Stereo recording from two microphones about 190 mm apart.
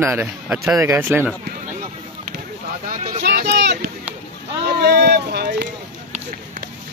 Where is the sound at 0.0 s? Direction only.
10° right (ahead or behind).